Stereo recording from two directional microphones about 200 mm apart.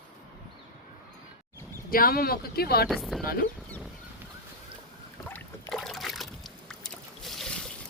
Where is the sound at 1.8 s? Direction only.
45° left (ahead or behind).